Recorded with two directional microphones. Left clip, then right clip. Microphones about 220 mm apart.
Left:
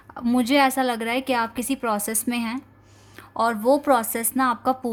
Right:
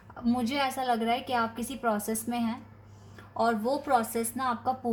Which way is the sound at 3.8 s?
50° left (ahead or behind).